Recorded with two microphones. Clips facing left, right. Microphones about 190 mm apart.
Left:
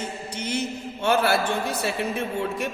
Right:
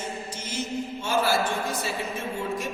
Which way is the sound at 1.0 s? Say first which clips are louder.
Left 4 dB; 65° left (ahead or behind).